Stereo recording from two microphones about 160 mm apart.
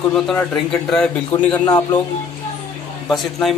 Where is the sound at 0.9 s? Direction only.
5° left (ahead or behind).